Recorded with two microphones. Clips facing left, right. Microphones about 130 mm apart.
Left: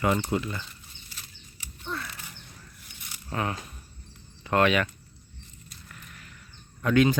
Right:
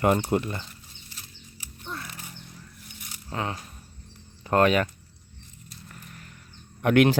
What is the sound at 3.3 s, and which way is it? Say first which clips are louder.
Speech: left 1 dB; 25° right (ahead or behind).